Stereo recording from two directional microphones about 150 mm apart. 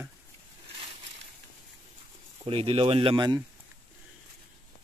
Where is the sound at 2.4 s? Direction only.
40° right (ahead or behind).